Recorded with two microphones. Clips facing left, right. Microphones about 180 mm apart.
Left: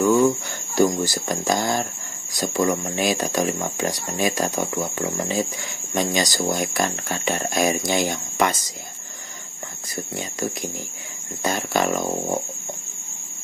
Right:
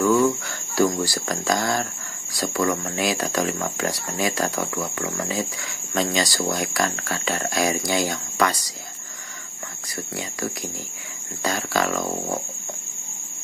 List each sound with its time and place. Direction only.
0.0 s speech: 20° left (ahead or behind)
9.9 s speech: 20° left (ahead or behind)